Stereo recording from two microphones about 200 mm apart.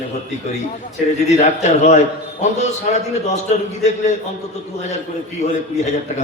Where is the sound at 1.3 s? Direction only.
35° left (ahead or behind).